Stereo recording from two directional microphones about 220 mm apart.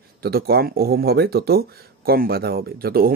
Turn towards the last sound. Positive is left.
turn(degrees=-45)  # may be behind; listen again after turning